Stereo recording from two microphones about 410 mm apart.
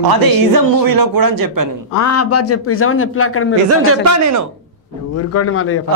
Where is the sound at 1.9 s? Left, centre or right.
Left.